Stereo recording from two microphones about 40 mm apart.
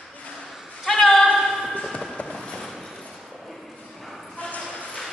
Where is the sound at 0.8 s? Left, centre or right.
Centre.